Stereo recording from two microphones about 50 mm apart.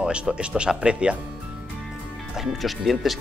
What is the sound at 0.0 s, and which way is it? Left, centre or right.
Speech, right.